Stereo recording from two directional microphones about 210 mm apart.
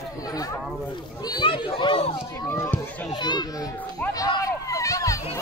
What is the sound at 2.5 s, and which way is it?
Speech, 10° left (ahead or behind).